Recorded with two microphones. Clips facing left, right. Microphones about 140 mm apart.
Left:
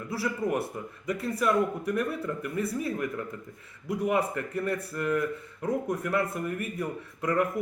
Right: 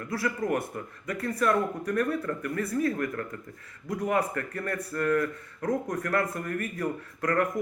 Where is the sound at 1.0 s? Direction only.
20° left (ahead or behind).